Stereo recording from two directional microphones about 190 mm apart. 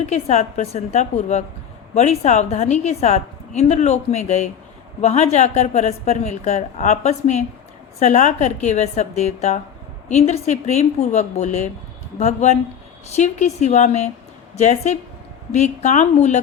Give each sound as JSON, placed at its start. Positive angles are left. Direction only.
{"t": 0.0, "sound": "a woman's voice", "side_deg": 35}